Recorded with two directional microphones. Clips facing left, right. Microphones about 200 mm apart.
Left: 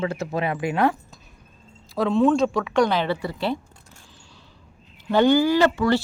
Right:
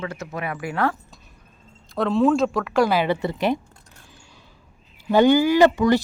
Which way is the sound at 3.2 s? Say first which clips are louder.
Right 4 dB; 20° right (ahead or behind).